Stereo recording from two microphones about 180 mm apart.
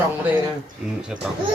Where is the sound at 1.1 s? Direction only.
5° right (ahead or behind).